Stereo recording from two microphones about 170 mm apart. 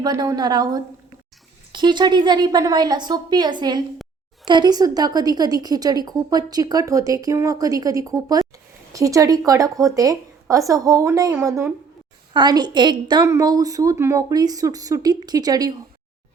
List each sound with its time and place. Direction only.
0.0 s a woman's voice: 20° right (ahead or behind)